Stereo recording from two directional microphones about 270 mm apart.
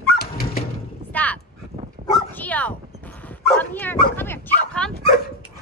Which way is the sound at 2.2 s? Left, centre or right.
Centre.